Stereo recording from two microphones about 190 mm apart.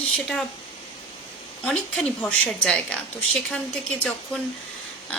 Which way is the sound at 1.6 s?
5° left (ahead or behind).